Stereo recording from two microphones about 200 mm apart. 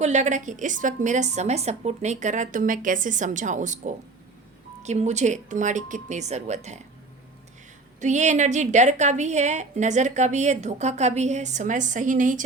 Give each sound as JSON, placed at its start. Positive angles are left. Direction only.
{"t": 0.0, "sound": "a woman's voice", "side_deg": -35}
{"t": 8.0, "sound": "a woman's voice", "side_deg": -35}